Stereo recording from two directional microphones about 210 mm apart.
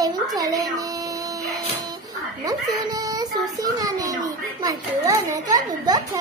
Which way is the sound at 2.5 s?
20° right (ahead or behind).